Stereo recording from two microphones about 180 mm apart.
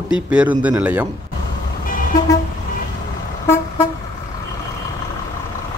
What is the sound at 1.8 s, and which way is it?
Vehicle, 50° left (ahead or behind).